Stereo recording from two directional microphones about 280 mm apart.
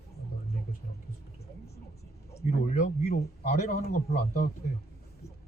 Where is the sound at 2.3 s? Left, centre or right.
Left.